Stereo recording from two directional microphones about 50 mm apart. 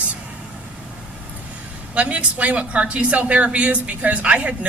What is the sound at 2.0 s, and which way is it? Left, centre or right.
A woman's voice, right.